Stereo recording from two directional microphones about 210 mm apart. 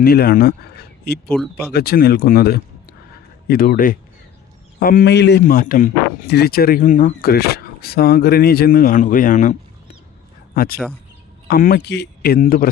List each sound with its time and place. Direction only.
0.0 s speech: 45° left (ahead or behind)
1.3 s speech: 5° left (ahead or behind)
1.7 s speech: 45° left (ahead or behind)